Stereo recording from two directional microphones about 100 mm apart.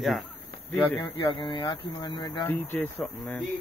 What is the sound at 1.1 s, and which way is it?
Speech, 55° left (ahead or behind).